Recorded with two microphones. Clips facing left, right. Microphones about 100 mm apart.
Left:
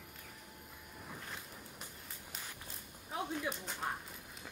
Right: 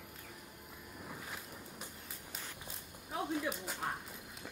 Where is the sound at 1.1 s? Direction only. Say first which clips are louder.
Right 1 dB; 5° right (ahead or behind).